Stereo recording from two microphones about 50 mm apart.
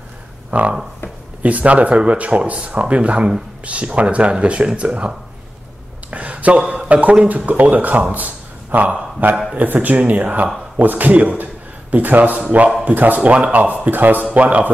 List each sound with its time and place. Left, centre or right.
0.5 s speech: right
6.0 s a sound: right
7.2 s a man's voice: right